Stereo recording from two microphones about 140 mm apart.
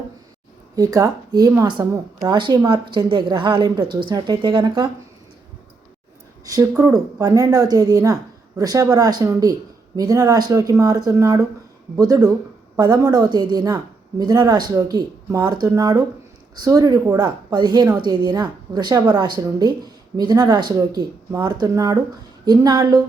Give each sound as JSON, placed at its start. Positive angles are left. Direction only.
{"t": 0.8, "sound": "a woman's voice", "side_deg": -25}
{"t": 6.4, "sound": "a woman's voice", "side_deg": -25}